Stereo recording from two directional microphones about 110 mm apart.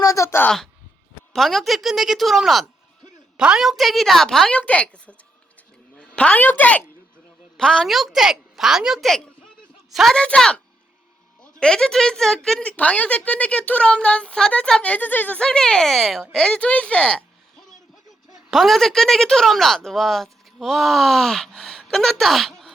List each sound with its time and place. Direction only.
0.0 s a sound: 30° left (ahead or behind)
0.4 s a woman's voice: 5° left (ahead or behind)
11.6 s a woman's voice: 5° left (ahead or behind)